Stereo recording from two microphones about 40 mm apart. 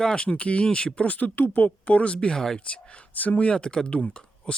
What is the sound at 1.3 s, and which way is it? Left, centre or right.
Speech, left.